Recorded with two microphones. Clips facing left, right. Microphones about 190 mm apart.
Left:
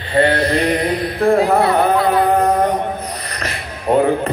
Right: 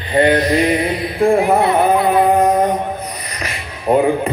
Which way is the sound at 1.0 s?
15° right (ahead or behind).